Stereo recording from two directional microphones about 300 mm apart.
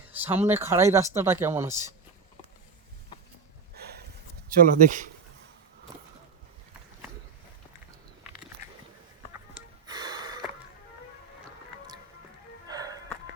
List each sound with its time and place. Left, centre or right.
0.1 s speech: centre
3.8 s a sound: right
4.5 s speech: right
9.8 s gasp: centre
12.6 s music: centre